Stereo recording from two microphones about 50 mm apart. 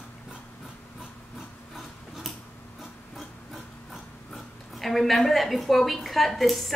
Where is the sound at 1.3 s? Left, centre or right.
Centre.